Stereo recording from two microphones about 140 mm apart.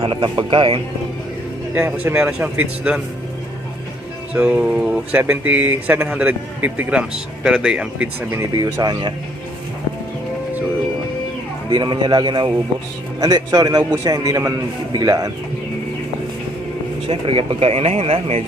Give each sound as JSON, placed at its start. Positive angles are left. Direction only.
{"t": 0.0, "sound": "speech", "side_deg": -35}
{"t": 1.7, "sound": "a man's voice", "side_deg": -15}
{"t": 4.4, "sound": "a man's voice", "side_deg": -10}
{"t": 8.5, "sound": "a man's voice", "side_deg": -25}
{"t": 11.7, "sound": "a man's voice", "side_deg": -30}
{"t": 17.1, "sound": "speech", "side_deg": -40}